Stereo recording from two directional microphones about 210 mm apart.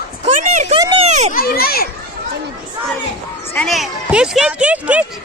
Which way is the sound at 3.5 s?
5° left (ahead or behind).